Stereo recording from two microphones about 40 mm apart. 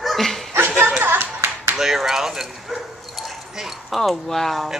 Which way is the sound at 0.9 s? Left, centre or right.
Right.